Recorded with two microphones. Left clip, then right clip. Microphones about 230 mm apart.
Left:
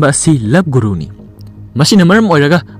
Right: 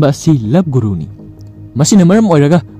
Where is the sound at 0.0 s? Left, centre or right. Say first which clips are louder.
Left 1 dB; centre.